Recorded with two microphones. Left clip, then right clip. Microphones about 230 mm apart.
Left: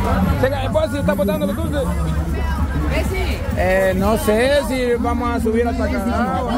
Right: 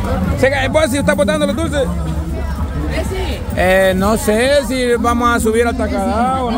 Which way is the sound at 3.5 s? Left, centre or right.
Right.